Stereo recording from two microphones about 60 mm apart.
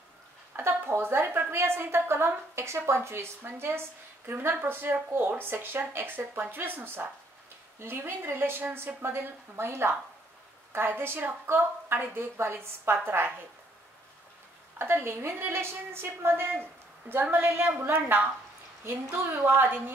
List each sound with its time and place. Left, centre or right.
0.6 s a woman's voice: right
14.8 s a woman's voice: right